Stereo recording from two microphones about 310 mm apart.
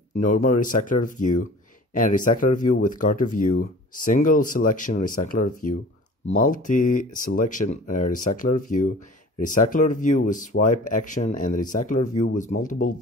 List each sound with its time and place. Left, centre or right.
0.1 s speech: left